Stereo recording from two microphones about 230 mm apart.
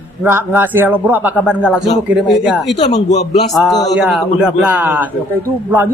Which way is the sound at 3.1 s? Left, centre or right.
Left.